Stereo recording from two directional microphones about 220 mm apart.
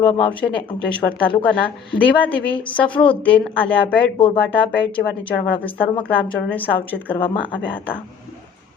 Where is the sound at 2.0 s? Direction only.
5° left (ahead or behind).